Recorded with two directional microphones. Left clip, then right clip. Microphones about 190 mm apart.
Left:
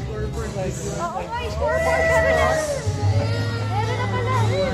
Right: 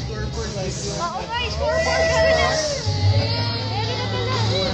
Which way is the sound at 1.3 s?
25° left (ahead or behind).